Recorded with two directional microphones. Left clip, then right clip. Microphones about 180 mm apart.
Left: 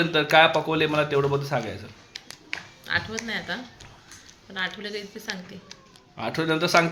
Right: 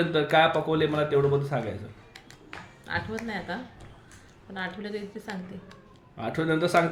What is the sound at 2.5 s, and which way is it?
A woman's voice, 20° right (ahead or behind).